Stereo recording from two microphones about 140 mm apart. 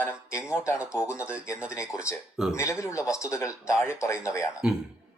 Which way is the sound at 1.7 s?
20° left (ahead or behind).